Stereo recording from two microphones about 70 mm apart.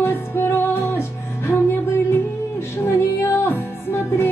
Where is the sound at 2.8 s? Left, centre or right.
Left.